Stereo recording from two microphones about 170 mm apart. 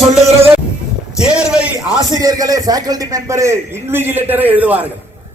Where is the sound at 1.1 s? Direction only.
5° right (ahead or behind).